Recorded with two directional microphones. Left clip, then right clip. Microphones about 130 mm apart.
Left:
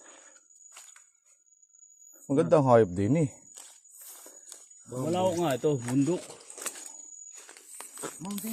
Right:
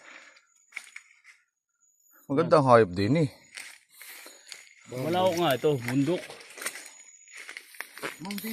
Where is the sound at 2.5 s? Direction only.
25° left (ahead or behind).